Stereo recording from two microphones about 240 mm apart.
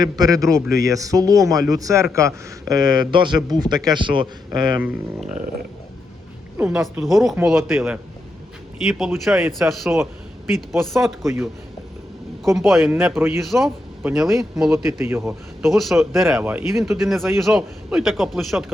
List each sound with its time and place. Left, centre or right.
0.0 s speech: centre
6.6 s a man's voice: centre
12.5 s a man's voice: centre